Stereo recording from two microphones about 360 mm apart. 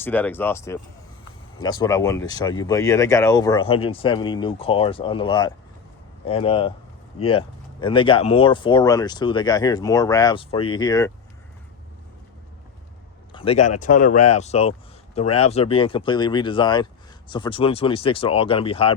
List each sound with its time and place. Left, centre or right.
0.0 s speech: centre
13.3 s speech: centre